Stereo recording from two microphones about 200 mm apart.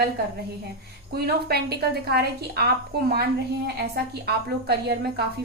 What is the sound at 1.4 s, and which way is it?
A woman's voice, 55° right (ahead or behind).